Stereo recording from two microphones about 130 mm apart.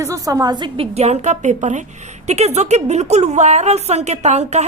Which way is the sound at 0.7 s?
55° right (ahead or behind).